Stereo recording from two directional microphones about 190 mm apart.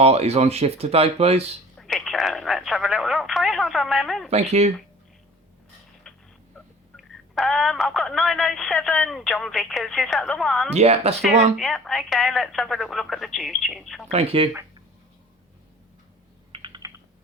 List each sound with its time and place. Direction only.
0.0 s speech: 35° right (ahead or behind)
1.7 s telephone: 5° left (ahead or behind)
4.3 s speech: 35° right (ahead or behind)
6.9 s speech: centre (ahead or behind)
10.8 s speech: 35° right (ahead or behind)
11.5 s speech: centre (ahead or behind)
14.1 s speech: 30° right (ahead or behind)
16.5 s typing: 25° right (ahead or behind)